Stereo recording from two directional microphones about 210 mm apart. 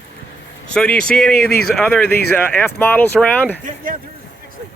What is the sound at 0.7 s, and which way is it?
Speech, 5° left (ahead or behind).